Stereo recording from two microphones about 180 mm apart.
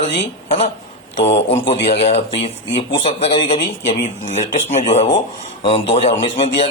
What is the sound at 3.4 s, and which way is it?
A man's voice, 45° left (ahead or behind).